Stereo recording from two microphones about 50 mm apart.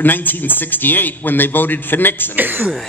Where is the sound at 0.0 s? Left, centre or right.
Left.